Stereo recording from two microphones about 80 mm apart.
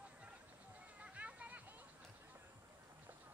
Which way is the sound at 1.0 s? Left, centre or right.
Centre.